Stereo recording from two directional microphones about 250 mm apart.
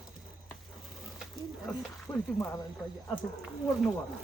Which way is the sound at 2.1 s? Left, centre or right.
Centre.